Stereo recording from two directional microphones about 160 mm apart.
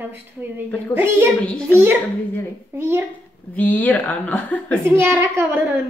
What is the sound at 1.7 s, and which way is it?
A child's voice, 15° right (ahead or behind).